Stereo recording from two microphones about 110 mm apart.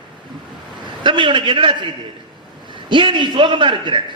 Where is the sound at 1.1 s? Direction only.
45° right (ahead or behind).